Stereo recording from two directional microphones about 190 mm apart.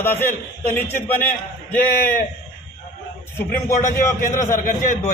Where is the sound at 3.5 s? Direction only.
40° left (ahead or behind).